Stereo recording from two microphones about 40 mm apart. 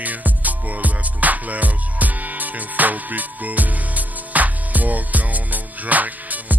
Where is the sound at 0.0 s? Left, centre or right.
Right.